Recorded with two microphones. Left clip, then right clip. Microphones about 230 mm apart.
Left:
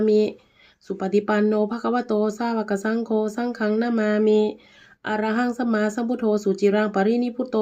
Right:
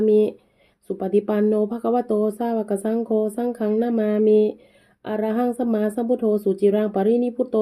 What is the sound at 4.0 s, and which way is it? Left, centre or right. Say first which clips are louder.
Speech: right 1 dB; left.